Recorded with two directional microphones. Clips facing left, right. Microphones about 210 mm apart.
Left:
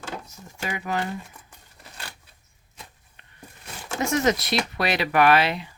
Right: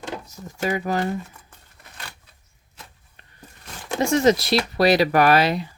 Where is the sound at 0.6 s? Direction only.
40° right (ahead or behind).